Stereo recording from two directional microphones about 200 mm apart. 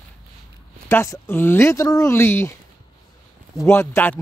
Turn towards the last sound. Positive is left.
turn(degrees=10)  # may be behind; listen again after turning